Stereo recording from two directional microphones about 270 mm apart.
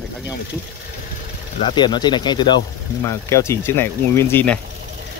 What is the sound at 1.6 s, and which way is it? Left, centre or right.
Speech, centre.